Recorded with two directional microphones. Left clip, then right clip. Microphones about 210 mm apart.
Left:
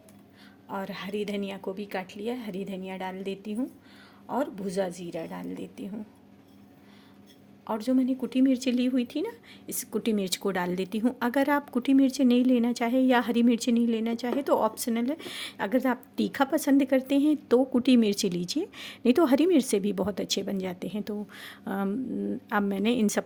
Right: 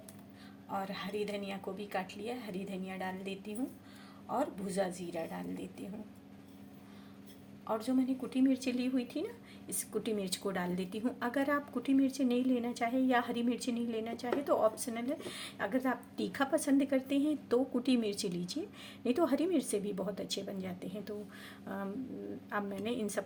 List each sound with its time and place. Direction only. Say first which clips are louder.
0.7 s speech: left 4 dB; 50° left (ahead or behind)
7.7 s speech: left 6 dB; 50° left (ahead or behind)